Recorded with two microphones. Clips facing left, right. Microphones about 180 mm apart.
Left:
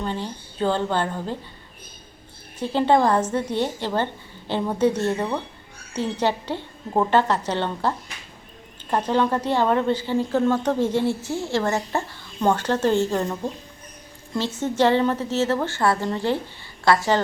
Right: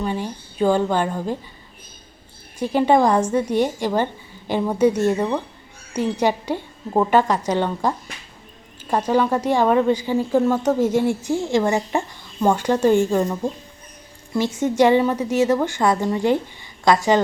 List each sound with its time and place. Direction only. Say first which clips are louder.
0.0 s a woman's voice: right 3 dB; 10° right (ahead or behind)
2.6 s a woman's voice: right 2 dB; 15° right (ahead or behind)
13.2 s speech: right 3 dB; centre (ahead or behind)
14.3 s a woman's voice: right 4 dB; 10° right (ahead or behind)